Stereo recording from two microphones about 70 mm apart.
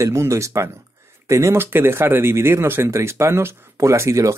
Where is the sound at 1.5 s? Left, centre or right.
Right.